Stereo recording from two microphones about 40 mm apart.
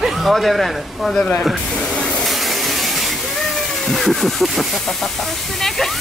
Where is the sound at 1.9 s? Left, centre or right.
Left.